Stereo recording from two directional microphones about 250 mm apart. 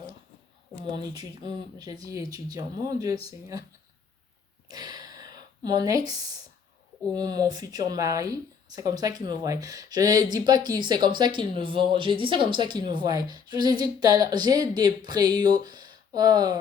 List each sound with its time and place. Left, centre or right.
0.9 s speech: centre
4.7 s a sound: centre
7.1 s speech: centre